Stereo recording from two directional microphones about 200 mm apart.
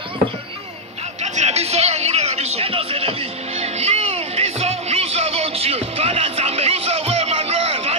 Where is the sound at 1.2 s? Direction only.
35° right (ahead or behind).